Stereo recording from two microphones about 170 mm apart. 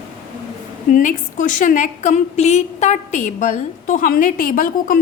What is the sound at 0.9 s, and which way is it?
A woman's voice, 50° left (ahead or behind).